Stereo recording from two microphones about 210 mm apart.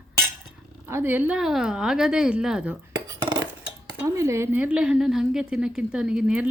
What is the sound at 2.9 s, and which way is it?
Cutlery, 20° right (ahead or behind).